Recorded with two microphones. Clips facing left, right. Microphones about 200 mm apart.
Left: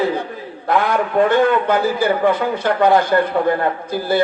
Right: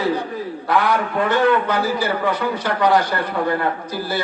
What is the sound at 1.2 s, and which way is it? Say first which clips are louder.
A man's voice: right 1 dB; 50° left (ahead or behind).